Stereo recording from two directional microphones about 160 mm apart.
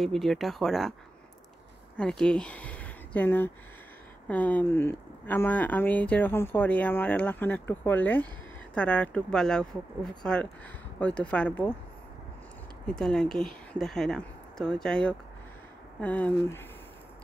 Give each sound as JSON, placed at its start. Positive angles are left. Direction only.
{"t": 0.0, "sound": "speech", "side_deg": 0}
{"t": 2.0, "sound": "speech", "side_deg": 5}
{"t": 12.8, "sound": "speech", "side_deg": 5}